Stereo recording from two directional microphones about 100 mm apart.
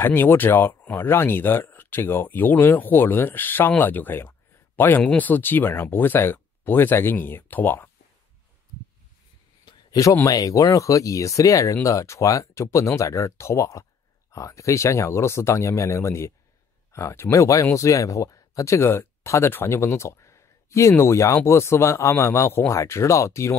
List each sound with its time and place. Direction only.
0.0 s speech: 20° left (ahead or behind)
9.7 s a sound: 40° left (ahead or behind)
10.2 s speech: 35° left (ahead or behind)